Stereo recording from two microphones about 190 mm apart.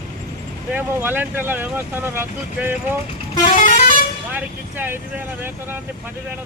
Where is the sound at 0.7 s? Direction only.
10° right (ahead or behind).